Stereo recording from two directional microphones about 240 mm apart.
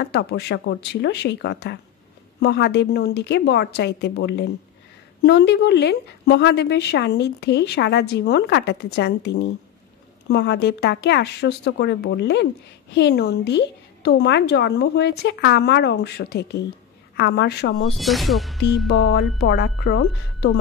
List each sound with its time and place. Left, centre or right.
0.0 s a woman's voice: left
17.9 s speech: centre
18.9 s a woman's voice: left